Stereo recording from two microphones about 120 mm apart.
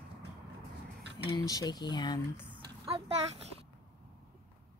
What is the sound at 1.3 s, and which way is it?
Speech, 35° left (ahead or behind).